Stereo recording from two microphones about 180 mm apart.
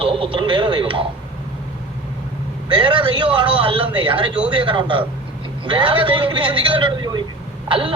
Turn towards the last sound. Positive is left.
turn(degrees=-30)  # may be behind; listen again after turning